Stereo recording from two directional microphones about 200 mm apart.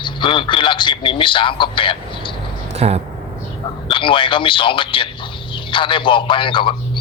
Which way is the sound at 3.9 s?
25° left (ahead or behind).